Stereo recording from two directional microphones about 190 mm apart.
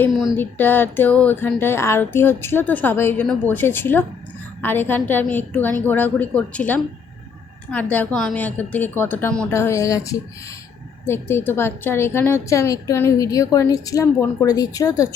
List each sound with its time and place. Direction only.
0.3 s a woman's voice: 10° left (ahead or behind)